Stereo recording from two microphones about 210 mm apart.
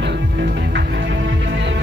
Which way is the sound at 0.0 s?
55° right (ahead or behind).